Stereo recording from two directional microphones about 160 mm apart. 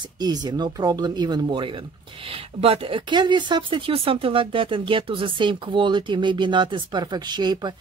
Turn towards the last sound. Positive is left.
turn(degrees=-25)  # may be behind; listen again after turning